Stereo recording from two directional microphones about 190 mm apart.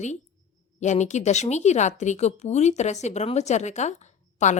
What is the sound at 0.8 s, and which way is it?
Speech, 40° left (ahead or behind).